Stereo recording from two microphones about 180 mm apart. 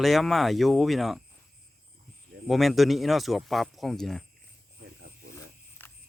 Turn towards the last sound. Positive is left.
turn(degrees=10)  # may be behind; listen again after turning